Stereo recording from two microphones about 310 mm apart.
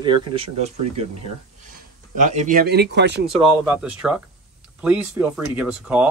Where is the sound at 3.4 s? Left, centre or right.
Centre.